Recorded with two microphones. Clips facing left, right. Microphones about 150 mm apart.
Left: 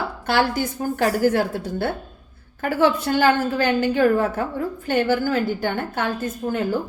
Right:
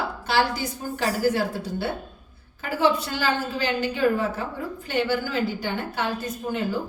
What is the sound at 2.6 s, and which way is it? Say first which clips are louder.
A woman's voice: left 3 dB; 55° left (ahead or behind).